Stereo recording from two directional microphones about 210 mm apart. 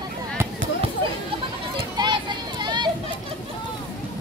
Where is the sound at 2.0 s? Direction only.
20° right (ahead or behind).